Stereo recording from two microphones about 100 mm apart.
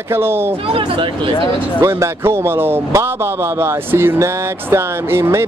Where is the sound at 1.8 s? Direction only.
25° right (ahead or behind).